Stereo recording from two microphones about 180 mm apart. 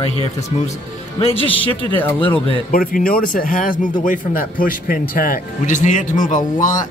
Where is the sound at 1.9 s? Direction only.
10° left (ahead or behind).